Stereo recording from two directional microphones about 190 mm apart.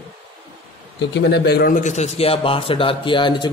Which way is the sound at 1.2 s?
65° left (ahead or behind).